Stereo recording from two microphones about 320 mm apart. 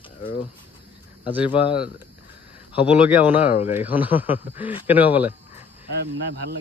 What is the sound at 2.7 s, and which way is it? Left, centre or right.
Speech, centre.